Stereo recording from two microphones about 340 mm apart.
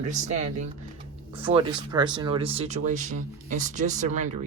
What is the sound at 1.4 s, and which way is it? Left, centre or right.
Speech, centre.